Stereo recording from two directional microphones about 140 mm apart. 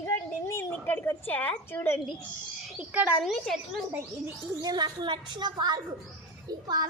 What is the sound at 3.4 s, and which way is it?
Speech, centre (ahead or behind).